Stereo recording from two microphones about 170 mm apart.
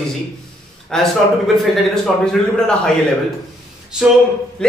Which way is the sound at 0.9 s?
5° left (ahead or behind).